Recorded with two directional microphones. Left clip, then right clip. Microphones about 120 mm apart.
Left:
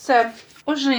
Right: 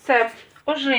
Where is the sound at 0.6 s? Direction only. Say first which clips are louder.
Even; 30° left (ahead or behind).